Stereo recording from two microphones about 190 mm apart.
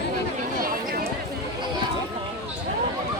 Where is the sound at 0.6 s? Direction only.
50° right (ahead or behind).